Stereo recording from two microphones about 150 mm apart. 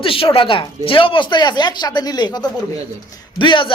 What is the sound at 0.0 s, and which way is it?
Speech, 35° left (ahead or behind).